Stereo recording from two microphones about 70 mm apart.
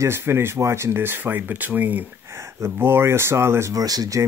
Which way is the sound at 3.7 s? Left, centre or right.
Right.